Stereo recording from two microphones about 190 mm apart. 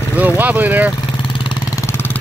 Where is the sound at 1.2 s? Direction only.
25° left (ahead or behind).